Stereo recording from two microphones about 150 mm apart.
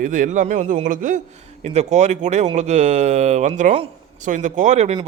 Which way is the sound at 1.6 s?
50° right (ahead or behind).